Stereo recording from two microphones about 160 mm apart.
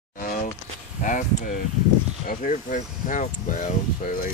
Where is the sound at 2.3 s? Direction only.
55° left (ahead or behind).